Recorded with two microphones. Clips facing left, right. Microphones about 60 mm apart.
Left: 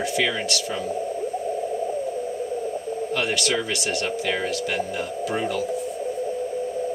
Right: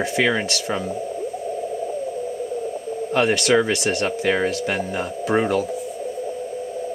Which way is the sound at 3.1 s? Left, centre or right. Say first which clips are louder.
Right 8 dB; right.